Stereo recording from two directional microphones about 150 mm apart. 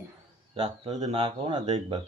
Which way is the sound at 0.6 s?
45° right (ahead or behind).